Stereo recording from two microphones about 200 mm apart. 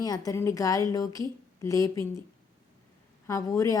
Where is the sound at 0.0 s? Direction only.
20° left (ahead or behind).